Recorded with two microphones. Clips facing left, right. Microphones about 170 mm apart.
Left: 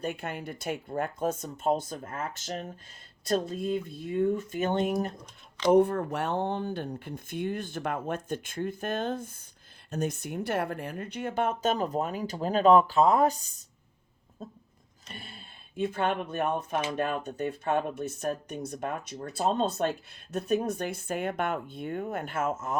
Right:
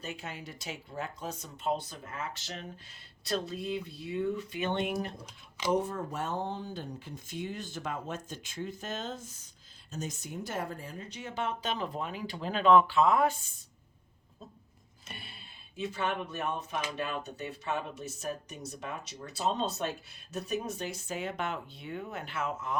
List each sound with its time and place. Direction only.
0.0 s speech: 55° left (ahead or behind)
5.1 s speech: 10° right (ahead or behind)
5.7 s speech: 60° left (ahead or behind); by 13.7 s 40° left (ahead or behind)
15.2 s speech: 50° left (ahead or behind)